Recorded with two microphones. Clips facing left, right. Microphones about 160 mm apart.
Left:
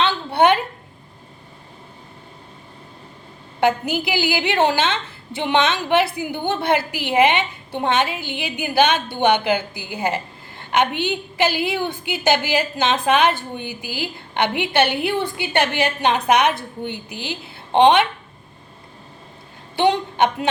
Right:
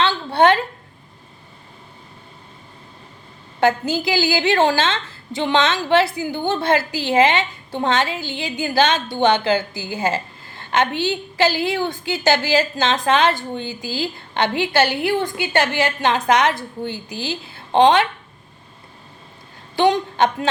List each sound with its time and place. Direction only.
0.0 s a sound: 20° left (ahead or behind)
3.6 s a woman's voice: 20° left (ahead or behind)
19.7 s a woman's voice: 20° left (ahead or behind)